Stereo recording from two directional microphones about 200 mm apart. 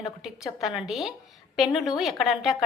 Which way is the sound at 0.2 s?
Centre (ahead or behind).